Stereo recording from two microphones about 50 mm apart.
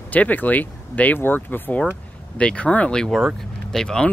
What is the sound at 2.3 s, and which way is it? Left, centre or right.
Speech, left.